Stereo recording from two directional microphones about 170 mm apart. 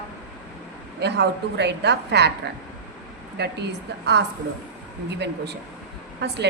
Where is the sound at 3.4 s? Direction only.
85° right.